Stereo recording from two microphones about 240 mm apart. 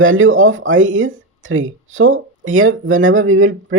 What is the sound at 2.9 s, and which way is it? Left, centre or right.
Speech, right.